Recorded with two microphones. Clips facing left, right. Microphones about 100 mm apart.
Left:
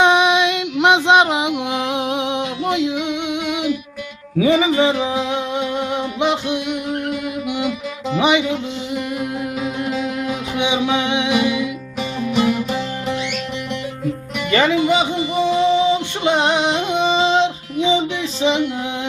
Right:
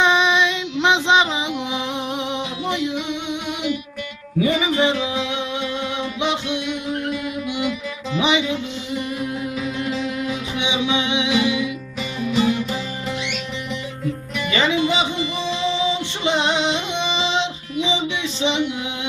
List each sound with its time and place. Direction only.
0.0 s music: 60° left (ahead or behind)
2.0 s a sound: 65° left (ahead or behind)
4.8 s music: 35° left (ahead or behind)
5.7 s music: 50° left (ahead or behind)
9.9 s music: 55° left (ahead or behind)
14.3 s music: 55° left (ahead or behind); by 18.7 s 40° left (ahead or behind)